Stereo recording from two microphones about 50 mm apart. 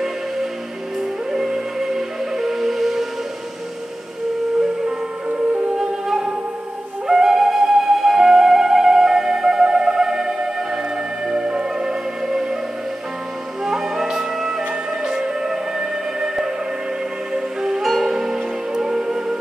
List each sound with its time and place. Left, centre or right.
1.3 s music: centre
4.6 s music: centre
6.0 s music: centre
13.7 s music: centre